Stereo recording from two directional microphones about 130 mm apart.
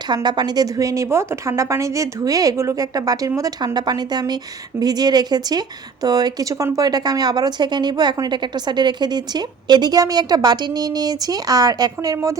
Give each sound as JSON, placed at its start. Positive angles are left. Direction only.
{"t": 0.1, "sound": "a woman's voice", "side_deg": -35}